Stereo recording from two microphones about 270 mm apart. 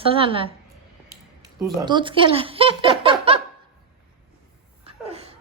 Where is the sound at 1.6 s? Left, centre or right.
Centre.